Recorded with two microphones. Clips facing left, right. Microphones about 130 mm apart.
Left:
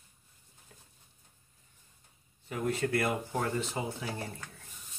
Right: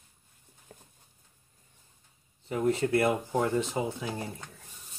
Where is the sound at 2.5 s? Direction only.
25° right (ahead or behind).